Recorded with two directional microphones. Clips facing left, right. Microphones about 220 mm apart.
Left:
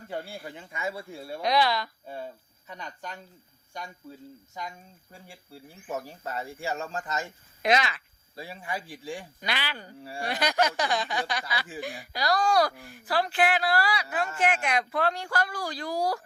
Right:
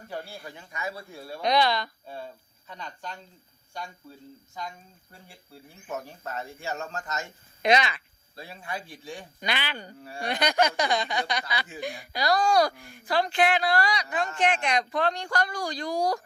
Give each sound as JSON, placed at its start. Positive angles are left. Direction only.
{"t": 0.1, "sound": "speech", "side_deg": 25}
{"t": 1.4, "sound": "speech", "side_deg": 5}
{"t": 2.0, "sound": "speech", "side_deg": 15}
{"t": 6.2, "sound": "speech", "side_deg": 10}
{"t": 6.7, "sound": "a man's voice", "side_deg": 30}
{"t": 7.6, "sound": "speech", "side_deg": 0}
{"t": 8.6, "sound": "speech", "side_deg": 15}
{"t": 9.4, "sound": "speech", "side_deg": 0}